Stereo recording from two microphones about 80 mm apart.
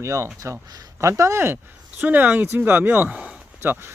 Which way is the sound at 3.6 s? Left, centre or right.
Right.